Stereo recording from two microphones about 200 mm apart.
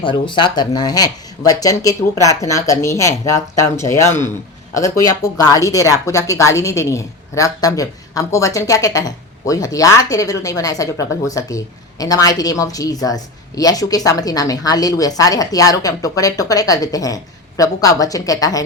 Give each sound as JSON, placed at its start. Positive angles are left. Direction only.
{"t": 0.0, "sound": "speech", "side_deg": 25}